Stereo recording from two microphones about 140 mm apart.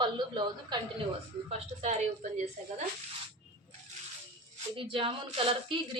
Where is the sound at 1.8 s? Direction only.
55° right (ahead or behind).